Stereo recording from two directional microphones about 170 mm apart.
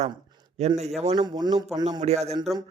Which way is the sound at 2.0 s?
40° right (ahead or behind).